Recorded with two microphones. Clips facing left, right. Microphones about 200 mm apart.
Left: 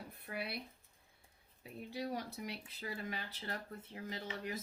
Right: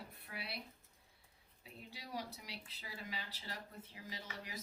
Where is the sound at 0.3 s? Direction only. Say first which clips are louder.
Left 6 dB; 55° left (ahead or behind).